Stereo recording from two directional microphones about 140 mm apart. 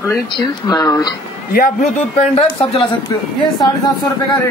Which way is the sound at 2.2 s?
45° left (ahead or behind).